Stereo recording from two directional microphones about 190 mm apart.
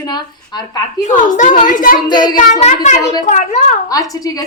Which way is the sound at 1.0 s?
40° left (ahead or behind).